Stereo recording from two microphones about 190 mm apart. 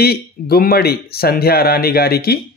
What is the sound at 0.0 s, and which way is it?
Speech, 55° left (ahead or behind).